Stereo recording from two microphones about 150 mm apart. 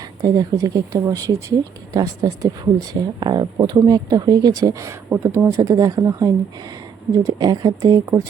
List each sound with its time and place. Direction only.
0.2 s speech: 20° right (ahead or behind)